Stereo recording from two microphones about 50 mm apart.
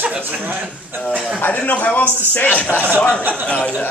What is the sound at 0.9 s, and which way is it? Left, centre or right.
Speech, right.